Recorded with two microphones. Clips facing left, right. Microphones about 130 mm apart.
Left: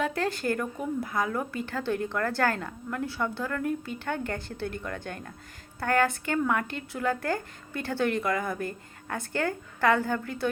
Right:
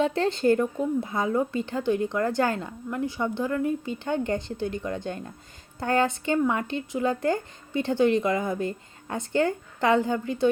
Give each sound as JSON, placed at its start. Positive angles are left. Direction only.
{"t": 0.0, "sound": "a woman's voice", "side_deg": -25}